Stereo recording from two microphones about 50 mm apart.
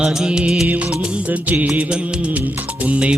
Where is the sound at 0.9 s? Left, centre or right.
Right.